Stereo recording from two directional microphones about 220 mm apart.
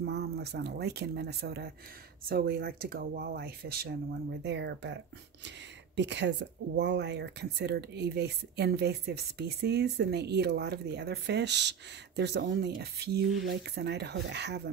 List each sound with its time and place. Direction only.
0.0 s speech: 50° right (ahead or behind)